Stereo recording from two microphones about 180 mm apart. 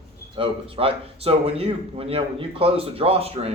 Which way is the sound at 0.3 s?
30° right (ahead or behind).